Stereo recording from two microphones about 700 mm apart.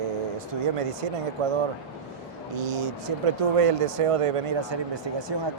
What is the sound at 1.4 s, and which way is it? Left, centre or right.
Speech, right.